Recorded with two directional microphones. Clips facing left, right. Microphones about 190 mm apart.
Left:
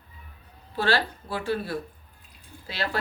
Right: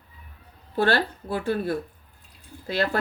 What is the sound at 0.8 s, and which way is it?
Speech, 55° right (ahead or behind).